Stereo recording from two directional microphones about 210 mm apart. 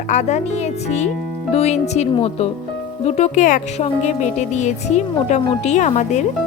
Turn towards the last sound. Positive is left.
turn(degrees=35)  # may be behind; listen again after turning